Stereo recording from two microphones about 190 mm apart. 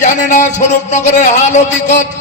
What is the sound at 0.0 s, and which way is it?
A man's voice, 40° left (ahead or behind).